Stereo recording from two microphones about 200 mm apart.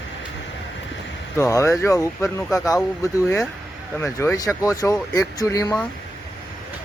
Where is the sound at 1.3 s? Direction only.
15° left (ahead or behind).